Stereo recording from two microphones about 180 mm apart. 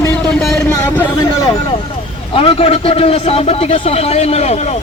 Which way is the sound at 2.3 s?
30° left (ahead or behind).